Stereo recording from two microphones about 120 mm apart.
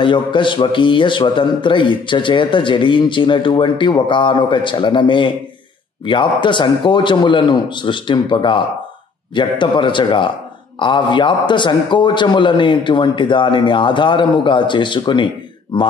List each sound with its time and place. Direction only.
0.0 s a man's voice: 45° left (ahead or behind)